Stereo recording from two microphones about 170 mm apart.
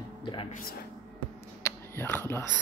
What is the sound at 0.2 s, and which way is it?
Music, 25° left (ahead or behind).